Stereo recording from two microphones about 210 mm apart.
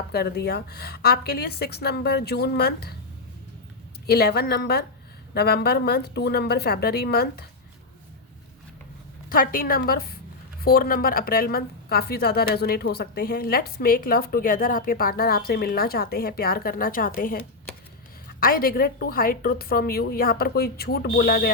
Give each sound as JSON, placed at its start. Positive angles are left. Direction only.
{"t": 0.1, "sound": "a woman's voice", "side_deg": 50}
{"t": 4.0, "sound": "a woman's voice", "side_deg": 50}
{"t": 9.3, "sound": "a woman's voice", "side_deg": 40}